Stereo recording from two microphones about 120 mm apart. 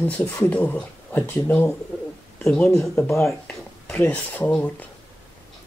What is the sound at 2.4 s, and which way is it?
Speech, 5° left (ahead or behind).